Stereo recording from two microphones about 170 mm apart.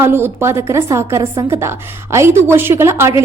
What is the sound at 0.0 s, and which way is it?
A woman's voice, 15° right (ahead or behind).